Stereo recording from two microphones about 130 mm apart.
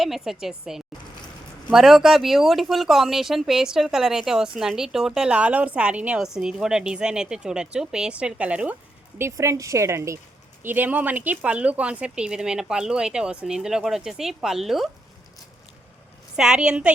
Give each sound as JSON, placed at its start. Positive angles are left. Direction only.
{"t": 0.0, "sound": "speech", "side_deg": 0}
{"t": 9.1, "sound": "a woman's voice", "side_deg": -20}
{"t": 16.3, "sound": "speech", "side_deg": -5}